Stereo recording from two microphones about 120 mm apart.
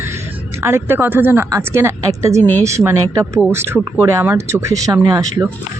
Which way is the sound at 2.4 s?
15° left (ahead or behind).